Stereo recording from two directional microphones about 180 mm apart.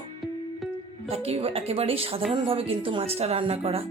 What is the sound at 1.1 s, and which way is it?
Speech, 35° right (ahead or behind).